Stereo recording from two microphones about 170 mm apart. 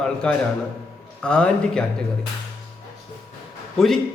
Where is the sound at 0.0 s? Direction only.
5° left (ahead or behind).